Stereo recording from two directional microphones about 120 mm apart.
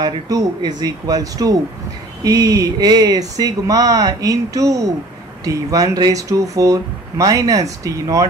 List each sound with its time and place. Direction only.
0.0 s speech: 35° right (ahead or behind)